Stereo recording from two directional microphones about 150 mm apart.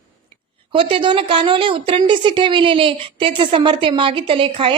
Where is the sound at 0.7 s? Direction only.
35° right (ahead or behind).